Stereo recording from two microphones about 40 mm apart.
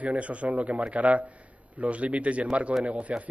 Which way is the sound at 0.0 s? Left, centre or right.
Right.